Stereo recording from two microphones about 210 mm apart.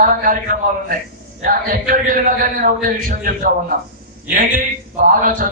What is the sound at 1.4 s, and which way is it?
A man's voice, 40° right (ahead or behind).